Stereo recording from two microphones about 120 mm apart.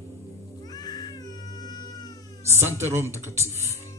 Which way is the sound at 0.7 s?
35° left (ahead or behind).